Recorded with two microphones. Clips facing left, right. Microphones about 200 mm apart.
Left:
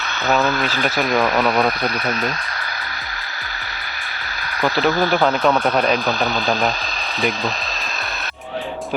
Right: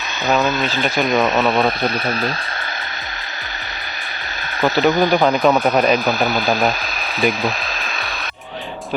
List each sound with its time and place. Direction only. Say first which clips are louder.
0.4 s speech: right 1 dB; 20° right (ahead or behind)
0.8 s speech: right 2 dB; centre (ahead or behind)
1.1 s speech: right 1 dB; 20° right (ahead or behind)
4.8 s speech: right 3 dB; 15° right (ahead or behind)